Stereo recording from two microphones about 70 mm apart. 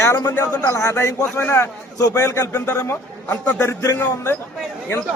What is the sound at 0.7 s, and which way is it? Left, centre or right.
Speech, left.